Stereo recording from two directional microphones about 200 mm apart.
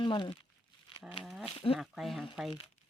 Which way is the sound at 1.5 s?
30° left (ahead or behind).